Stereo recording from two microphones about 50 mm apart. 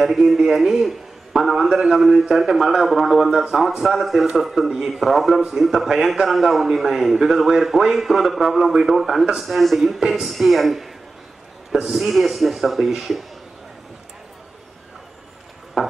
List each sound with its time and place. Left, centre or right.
0.0 s a man's voice: centre
9.2 s a man's voice: centre
9.5 s a man's voice: centre
15.8 s a sound: centre